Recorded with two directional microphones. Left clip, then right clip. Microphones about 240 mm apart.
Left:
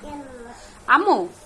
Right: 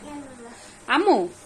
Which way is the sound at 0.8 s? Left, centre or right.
Centre.